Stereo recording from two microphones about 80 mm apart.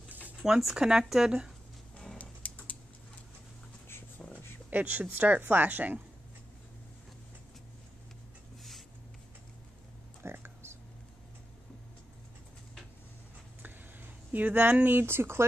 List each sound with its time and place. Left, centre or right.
0.4 s speech: centre
2.0 s typing: centre
4.6 s speech: centre
10.2 s a sound: right
14.3 s speech: right